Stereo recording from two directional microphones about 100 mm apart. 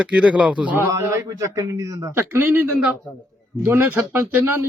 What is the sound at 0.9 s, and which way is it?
A man's voice, 30° right (ahead or behind).